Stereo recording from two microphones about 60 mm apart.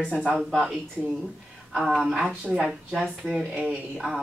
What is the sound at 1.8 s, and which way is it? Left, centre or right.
Speech, centre.